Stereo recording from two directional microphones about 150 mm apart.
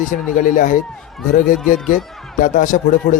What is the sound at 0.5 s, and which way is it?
Speech, 65° left (ahead or behind).